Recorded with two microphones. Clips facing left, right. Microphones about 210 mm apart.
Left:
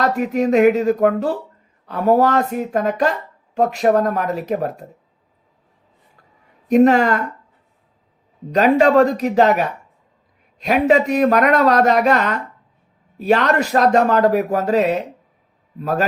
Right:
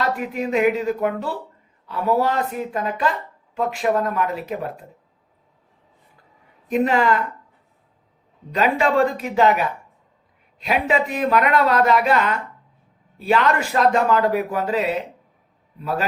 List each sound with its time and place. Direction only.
0.0 s speech: 45° left (ahead or behind)
6.7 s speech: 45° left (ahead or behind)
8.5 s speech: 40° left (ahead or behind)